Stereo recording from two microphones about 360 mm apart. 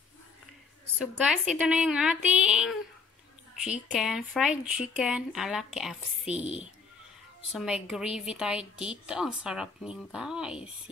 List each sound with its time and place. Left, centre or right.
0.9 s a woman's voice: centre
7.5 s a woman's voice: centre